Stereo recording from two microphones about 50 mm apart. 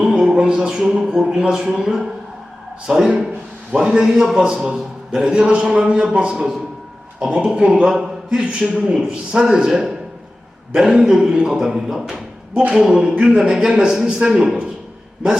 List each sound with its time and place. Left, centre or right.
0.2 s a sound: centre
0.4 s a man's voice: centre
7.9 s speech: centre